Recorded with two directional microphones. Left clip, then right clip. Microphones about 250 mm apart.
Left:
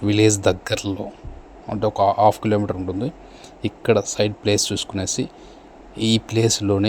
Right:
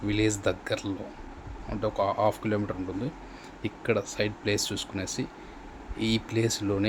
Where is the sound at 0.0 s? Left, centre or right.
Left.